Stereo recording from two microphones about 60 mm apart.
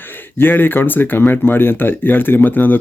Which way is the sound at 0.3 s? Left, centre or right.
Left.